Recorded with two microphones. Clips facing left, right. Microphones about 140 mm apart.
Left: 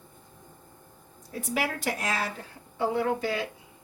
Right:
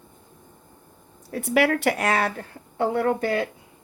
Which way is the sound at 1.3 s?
65° right (ahead or behind).